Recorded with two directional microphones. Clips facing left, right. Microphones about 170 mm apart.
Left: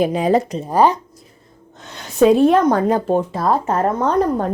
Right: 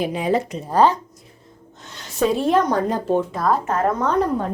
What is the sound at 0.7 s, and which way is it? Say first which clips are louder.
Speech: left 2 dB; 10° left (ahead or behind).